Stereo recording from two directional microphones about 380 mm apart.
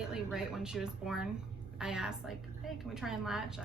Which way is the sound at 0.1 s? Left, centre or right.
Centre.